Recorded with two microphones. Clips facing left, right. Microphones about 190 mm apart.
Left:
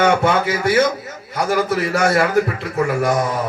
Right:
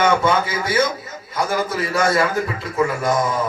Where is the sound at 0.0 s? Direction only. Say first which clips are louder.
Left 2 dB; 65° left (ahead or behind).